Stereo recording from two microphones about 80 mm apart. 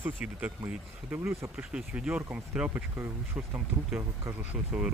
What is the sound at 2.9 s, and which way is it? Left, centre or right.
Speech, right.